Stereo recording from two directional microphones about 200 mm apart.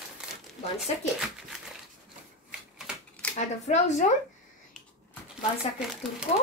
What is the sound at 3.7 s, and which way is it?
Speech, 35° left (ahead or behind).